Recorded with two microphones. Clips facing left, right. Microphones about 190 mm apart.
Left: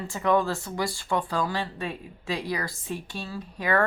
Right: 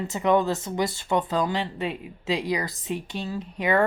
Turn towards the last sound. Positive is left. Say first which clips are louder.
# right 3 dB
turn(degrees=-20)  # may be behind; listen again after turning